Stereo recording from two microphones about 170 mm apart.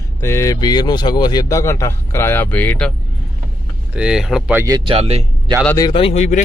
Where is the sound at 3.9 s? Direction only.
5° right (ahead or behind).